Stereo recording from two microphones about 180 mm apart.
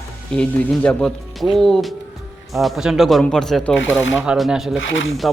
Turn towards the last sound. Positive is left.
turn(degrees=90)